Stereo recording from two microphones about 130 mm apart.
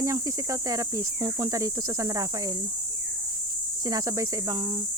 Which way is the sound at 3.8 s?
25° right (ahead or behind).